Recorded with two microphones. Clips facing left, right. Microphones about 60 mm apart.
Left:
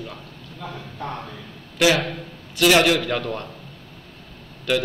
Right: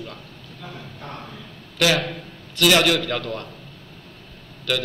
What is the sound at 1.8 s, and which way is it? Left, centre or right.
A man's voice, centre.